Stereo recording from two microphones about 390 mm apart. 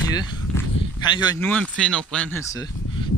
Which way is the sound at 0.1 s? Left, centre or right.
Centre.